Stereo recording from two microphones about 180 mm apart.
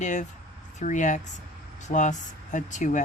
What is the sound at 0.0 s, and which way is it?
A woman's voice, 40° left (ahead or behind).